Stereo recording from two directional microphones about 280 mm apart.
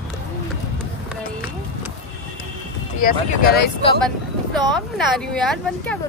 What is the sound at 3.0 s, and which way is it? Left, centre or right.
Speech, left.